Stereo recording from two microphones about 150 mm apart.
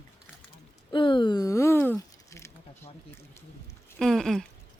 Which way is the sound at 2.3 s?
20° left (ahead or behind).